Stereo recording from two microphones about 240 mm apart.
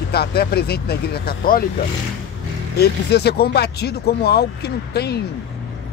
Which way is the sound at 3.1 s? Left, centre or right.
Left.